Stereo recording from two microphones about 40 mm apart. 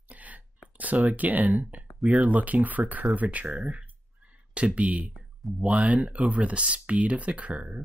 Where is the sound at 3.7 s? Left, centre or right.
Right.